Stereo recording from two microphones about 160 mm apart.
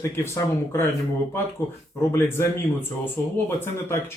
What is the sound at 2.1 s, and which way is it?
Speech, 15° left (ahead or behind).